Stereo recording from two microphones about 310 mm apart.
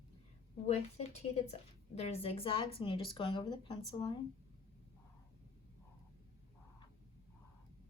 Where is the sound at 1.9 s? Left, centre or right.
Centre.